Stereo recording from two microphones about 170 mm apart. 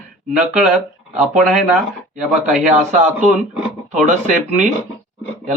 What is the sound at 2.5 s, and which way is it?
Speech, 45° right (ahead or behind).